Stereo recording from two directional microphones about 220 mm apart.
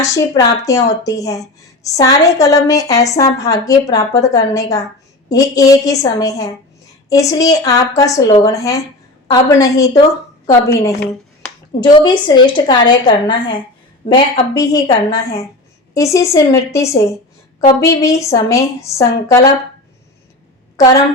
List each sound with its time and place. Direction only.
0.0 s a woman's voice: 15° left (ahead or behind)